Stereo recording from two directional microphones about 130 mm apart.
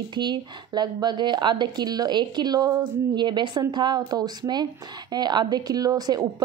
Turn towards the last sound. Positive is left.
turn(degrees=-30)  # may be behind; listen again after turning